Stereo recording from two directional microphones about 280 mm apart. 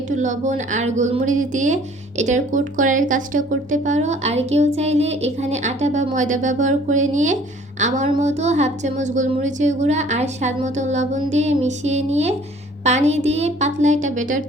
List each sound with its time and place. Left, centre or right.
0.1 s a woman's voice: right